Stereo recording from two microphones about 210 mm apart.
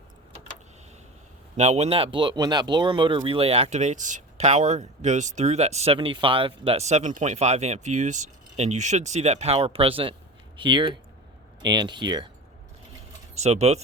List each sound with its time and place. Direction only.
1.5 s speech: 30° right (ahead or behind)
13.3 s speech: 30° right (ahead or behind)